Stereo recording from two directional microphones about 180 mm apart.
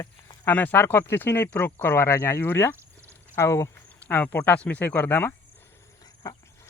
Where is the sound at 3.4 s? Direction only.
15° left (ahead or behind).